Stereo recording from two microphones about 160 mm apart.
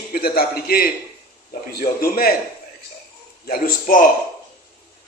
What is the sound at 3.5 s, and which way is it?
Speech, 65° left (ahead or behind).